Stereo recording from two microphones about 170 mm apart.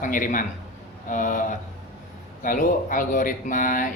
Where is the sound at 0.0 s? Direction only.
50° left (ahead or behind).